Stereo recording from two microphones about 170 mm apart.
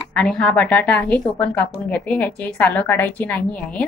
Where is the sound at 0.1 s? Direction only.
5° left (ahead or behind).